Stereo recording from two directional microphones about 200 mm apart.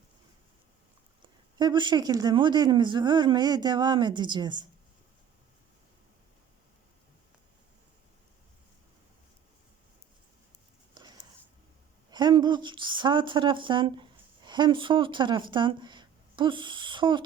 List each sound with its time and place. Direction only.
1.5 s speech: 20° right (ahead or behind)
12.1 s speech: 20° right (ahead or behind)